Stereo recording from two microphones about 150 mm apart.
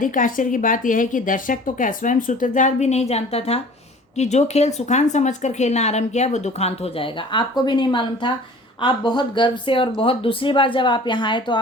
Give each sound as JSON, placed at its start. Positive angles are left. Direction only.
{"t": 0.0, "sound": "speech", "side_deg": 60}